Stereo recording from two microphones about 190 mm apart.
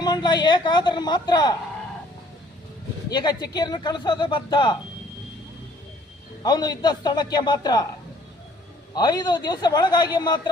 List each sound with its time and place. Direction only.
0.0 s speech: 20° left (ahead or behind)
3.1 s speech: 20° left (ahead or behind)
6.4 s speech: 20° left (ahead or behind)
9.0 s speech: 20° left (ahead or behind)